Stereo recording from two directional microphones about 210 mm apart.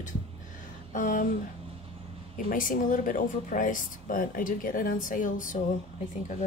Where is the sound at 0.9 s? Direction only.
40° left (ahead or behind).